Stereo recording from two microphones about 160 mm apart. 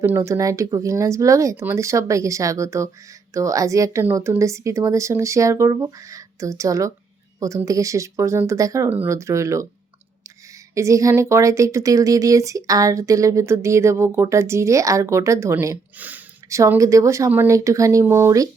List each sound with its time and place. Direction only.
0.0 s speech: 15° right (ahead or behind)
10.8 s speech: 20° right (ahead or behind)